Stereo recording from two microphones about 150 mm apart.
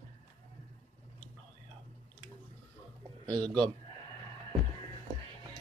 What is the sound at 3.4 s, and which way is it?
Speech, 10° left (ahead or behind).